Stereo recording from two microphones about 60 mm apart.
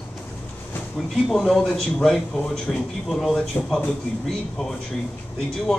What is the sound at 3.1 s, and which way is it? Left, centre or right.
A man's voice, centre.